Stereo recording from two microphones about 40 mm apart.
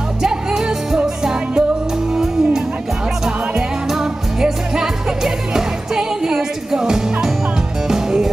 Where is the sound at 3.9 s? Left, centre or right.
Centre.